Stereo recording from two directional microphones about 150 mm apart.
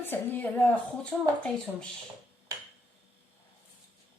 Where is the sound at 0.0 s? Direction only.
15° left (ahead or behind).